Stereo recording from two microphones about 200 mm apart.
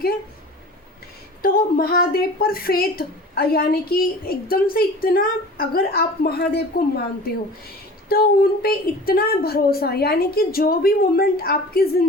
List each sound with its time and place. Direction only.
1.4 s a woman's voice: 50° left (ahead or behind)
8.1 s a woman's voice: 50° left (ahead or behind)